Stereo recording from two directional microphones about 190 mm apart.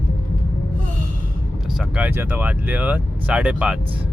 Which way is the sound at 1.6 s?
5° right (ahead or behind).